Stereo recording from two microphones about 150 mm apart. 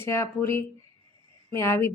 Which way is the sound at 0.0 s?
15° left (ahead or behind).